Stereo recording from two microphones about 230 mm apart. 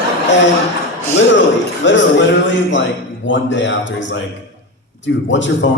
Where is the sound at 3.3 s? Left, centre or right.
Left.